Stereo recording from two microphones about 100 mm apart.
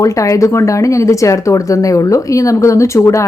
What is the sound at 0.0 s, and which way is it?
Speech, 35° left (ahead or behind).